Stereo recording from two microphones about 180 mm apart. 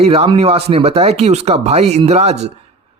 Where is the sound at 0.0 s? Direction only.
35° right (ahead or behind).